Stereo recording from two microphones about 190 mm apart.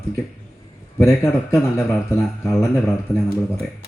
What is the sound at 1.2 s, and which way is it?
Speech, 15° left (ahead or behind).